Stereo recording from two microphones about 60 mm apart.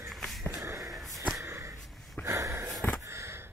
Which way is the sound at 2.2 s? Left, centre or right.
Right.